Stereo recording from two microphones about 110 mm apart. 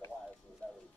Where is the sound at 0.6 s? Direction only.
10° left (ahead or behind).